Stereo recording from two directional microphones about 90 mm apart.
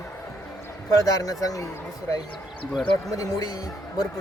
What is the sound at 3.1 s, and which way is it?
Speech, 40° left (ahead or behind).